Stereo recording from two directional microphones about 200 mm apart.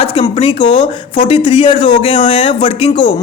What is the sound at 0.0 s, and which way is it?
A man's voice, 25° left (ahead or behind).